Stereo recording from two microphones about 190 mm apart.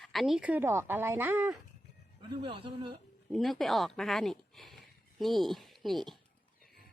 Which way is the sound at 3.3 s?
Centre (ahead or behind).